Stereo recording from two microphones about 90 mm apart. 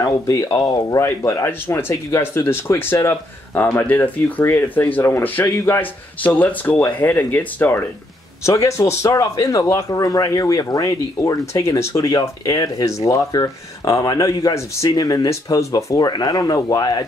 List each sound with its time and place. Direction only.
0.0 s speech: 35° left (ahead or behind)
1.0 s speech: 30° left (ahead or behind)
8.5 s speech: 35° left (ahead or behind)